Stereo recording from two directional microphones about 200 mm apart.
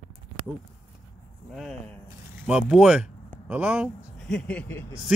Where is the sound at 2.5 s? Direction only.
5° right (ahead or behind).